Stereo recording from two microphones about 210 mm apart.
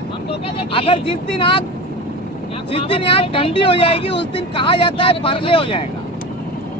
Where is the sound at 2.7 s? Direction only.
25° left (ahead or behind).